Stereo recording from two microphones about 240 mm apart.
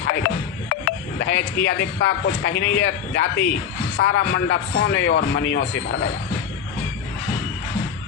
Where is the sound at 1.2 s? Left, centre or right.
Left.